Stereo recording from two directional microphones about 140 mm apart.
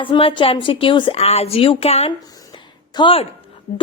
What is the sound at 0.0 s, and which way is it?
Speech, 40° left (ahead or behind).